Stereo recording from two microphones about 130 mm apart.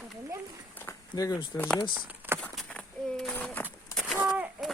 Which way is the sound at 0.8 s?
25° left (ahead or behind).